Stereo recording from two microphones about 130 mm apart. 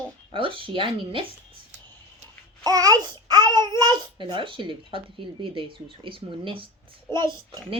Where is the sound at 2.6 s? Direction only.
30° right (ahead or behind).